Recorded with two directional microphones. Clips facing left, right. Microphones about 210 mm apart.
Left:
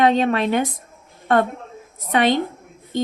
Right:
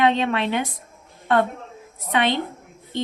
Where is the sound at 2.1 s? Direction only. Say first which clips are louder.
Left 4 dB; 45° left (ahead or behind).